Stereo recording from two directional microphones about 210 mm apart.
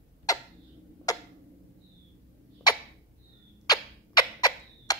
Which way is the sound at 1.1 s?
15° left (ahead or behind).